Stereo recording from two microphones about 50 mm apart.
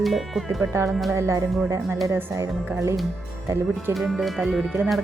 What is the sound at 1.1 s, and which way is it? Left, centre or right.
Speech, right.